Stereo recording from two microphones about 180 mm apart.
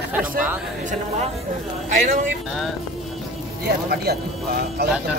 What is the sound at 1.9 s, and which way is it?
Speech, 45° right (ahead or behind).